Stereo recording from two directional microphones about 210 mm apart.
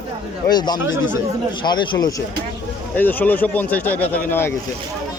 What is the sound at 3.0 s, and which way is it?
A man's voice, 10° left (ahead or behind).